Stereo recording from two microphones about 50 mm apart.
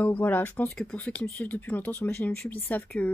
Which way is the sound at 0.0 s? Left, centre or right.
Left.